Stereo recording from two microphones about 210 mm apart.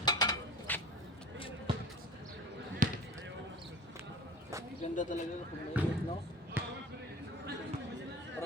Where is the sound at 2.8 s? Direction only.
40° right (ahead or behind).